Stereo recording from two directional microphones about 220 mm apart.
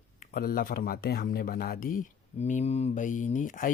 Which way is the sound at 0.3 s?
40° left (ahead or behind).